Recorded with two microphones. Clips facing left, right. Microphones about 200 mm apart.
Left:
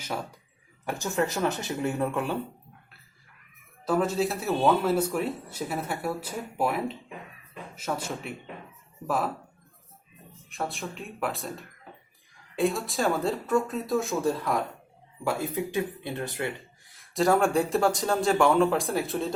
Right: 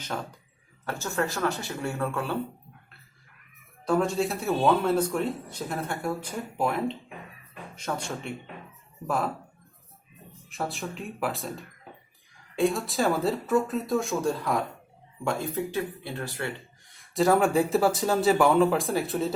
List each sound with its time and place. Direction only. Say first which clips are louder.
0.0 s speech: even; 10° left (ahead or behind)
3.8 s speech: even; centre (ahead or behind)
10.5 s speech: right 1 dB; centre (ahead or behind); by 16.5 s 20° left (ahead or behind)
16.9 s speech: right 1 dB; centre (ahead or behind)